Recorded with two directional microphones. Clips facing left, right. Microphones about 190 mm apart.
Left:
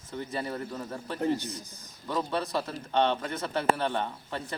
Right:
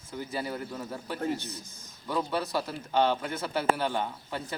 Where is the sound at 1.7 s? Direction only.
35° left (ahead or behind).